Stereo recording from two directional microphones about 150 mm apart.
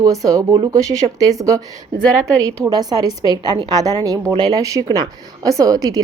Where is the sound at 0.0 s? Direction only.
20° right (ahead or behind).